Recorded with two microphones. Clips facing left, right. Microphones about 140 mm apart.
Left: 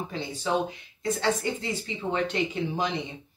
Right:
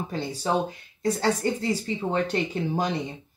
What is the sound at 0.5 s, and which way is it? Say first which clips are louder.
Speech: right 1 dB; 40° right (ahead or behind).